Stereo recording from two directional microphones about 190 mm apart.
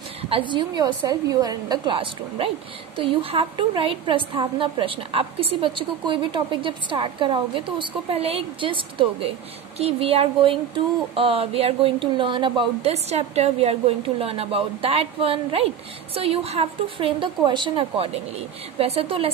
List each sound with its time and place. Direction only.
0.3 s a woman's voice: 25° right (ahead or behind)